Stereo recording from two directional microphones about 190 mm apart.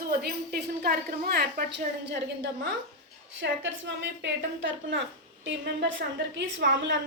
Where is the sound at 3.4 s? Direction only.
75° right (ahead or behind).